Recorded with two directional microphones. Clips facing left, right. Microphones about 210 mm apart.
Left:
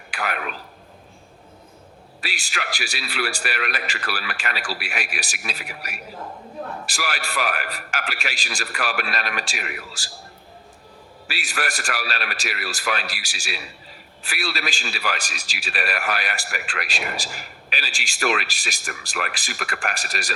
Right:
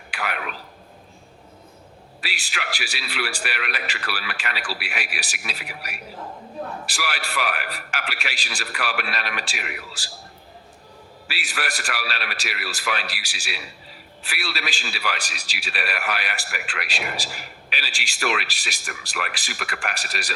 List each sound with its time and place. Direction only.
0.1 s a sound: 45° left (ahead or behind)
2.2 s a man's voice: 45° left (ahead or behind)
11.3 s a man's voice: 45° left (ahead or behind)